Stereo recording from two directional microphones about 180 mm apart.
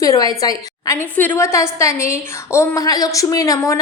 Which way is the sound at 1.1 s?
10° left (ahead or behind).